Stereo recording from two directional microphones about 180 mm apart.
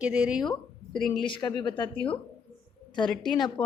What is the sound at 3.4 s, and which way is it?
Speech, 25° left (ahead or behind).